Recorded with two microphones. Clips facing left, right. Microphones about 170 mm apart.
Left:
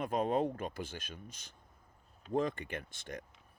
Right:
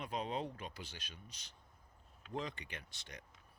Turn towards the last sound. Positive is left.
turn(degrees=50)  # may be behind; listen again after turning